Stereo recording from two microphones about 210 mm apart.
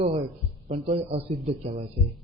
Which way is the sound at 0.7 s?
30° right (ahead or behind).